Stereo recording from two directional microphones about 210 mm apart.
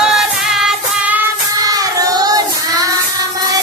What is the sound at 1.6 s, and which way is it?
Child singing, 15° right (ahead or behind).